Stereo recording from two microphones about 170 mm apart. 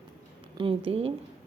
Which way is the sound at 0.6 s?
30° right (ahead or behind).